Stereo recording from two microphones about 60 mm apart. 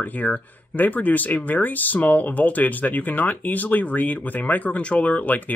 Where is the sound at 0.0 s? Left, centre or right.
Left.